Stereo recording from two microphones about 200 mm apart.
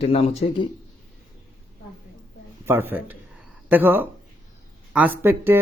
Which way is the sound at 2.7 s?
10° right (ahead or behind).